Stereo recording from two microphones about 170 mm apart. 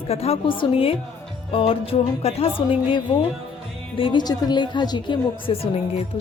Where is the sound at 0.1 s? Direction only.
35° left (ahead or behind).